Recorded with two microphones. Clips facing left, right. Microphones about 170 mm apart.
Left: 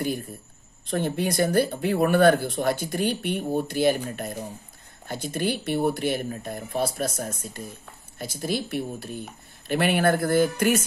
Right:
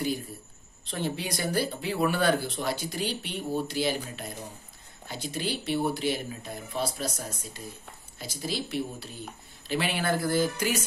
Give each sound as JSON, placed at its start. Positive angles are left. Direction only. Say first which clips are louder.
{"t": 0.8, "sound": "speech", "louder": "left 7 dB", "side_deg": 50}